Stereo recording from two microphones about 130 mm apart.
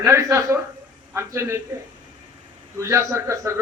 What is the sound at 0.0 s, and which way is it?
A man's voice, 20° right (ahead or behind).